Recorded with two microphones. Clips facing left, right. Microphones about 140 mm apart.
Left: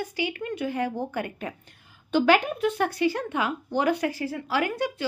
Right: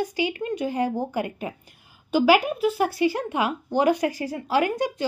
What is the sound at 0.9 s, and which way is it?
A woman's voice, 10° right (ahead or behind).